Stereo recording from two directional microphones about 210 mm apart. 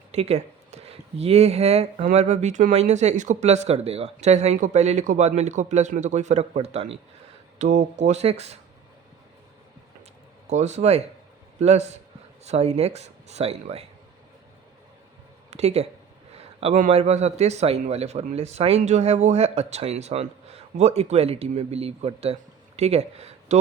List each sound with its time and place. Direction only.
0.1 s a man's voice: 30° right (ahead or behind)
10.4 s a man's voice: 30° right (ahead or behind)
15.4 s a man's voice: 30° right (ahead or behind)